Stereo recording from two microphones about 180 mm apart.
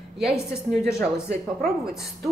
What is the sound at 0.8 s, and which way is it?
Speech, 15° left (ahead or behind).